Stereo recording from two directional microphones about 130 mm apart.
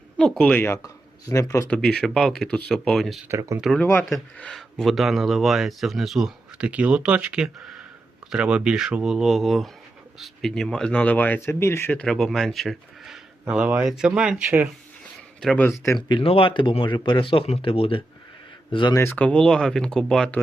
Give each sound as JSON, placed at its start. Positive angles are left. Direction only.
{"t": 0.2, "sound": "speech", "side_deg": 5}
{"t": 0.6, "sound": "speech", "side_deg": 25}
{"t": 1.7, "sound": "speech", "side_deg": 5}
{"t": 3.2, "sound": "speech", "side_deg": -20}
{"t": 3.8, "sound": "speech", "side_deg": 15}
{"t": 4.1, "sound": "speech", "side_deg": 5}
{"t": 15.4, "sound": "speech", "side_deg": 5}
{"t": 16.0, "sound": "speech", "side_deg": 35}
{"t": 18.9, "sound": "speech", "side_deg": 15}